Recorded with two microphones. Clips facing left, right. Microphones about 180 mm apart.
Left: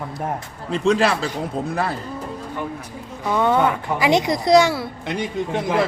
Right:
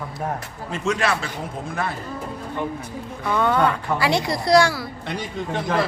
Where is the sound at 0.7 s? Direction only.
35° left (ahead or behind).